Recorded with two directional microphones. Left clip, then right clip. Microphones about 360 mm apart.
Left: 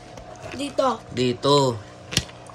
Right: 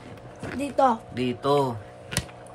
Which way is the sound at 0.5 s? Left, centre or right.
Right.